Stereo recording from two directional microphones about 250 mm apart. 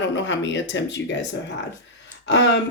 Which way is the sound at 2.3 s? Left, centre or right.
Left.